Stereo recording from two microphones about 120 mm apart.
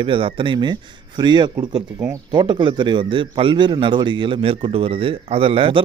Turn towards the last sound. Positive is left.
turn(degrees=-50)  # may be behind; listen again after turning